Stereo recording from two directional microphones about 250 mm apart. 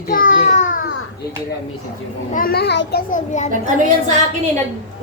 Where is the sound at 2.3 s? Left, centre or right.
Left.